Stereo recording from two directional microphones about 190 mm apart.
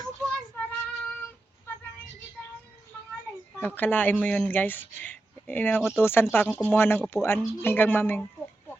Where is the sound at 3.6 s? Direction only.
10° left (ahead or behind).